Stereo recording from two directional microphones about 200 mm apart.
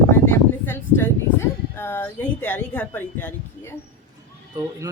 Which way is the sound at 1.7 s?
10° left (ahead or behind).